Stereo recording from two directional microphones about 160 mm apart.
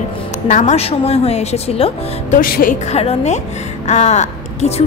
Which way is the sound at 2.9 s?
40° left (ahead or behind).